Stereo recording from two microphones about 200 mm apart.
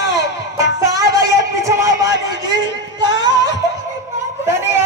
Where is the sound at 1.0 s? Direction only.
60° left (ahead or behind).